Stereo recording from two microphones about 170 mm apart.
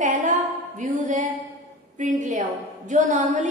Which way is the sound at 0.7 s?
50° right (ahead or behind).